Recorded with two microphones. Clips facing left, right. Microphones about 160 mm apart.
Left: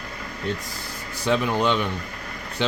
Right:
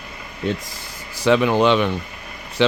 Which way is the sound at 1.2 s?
90° right.